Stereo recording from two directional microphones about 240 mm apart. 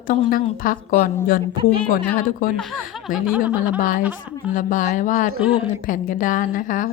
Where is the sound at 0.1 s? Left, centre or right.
Left.